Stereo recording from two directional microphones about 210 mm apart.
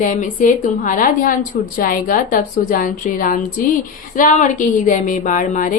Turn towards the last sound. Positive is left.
turn(degrees=40)  # may be behind; listen again after turning